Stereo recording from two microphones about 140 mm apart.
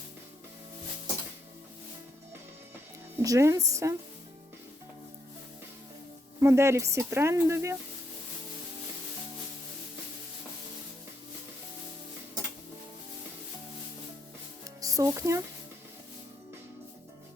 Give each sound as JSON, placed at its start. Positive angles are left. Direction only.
{"t": 3.2, "sound": "speech", "side_deg": -20}
{"t": 6.4, "sound": "speech", "side_deg": -20}
{"t": 14.8, "sound": "speech", "side_deg": -25}